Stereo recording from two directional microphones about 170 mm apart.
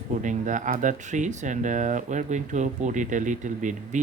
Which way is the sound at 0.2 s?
45° right (ahead or behind).